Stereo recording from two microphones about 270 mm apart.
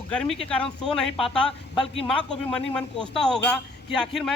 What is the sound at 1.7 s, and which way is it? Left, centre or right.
Speech, left.